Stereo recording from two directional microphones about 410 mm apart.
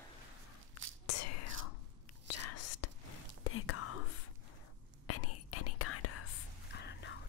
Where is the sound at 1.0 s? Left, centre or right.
Left.